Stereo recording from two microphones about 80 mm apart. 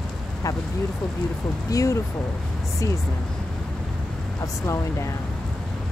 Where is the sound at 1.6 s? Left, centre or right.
Left.